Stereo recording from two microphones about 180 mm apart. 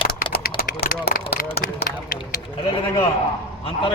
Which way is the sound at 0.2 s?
55° left (ahead or behind).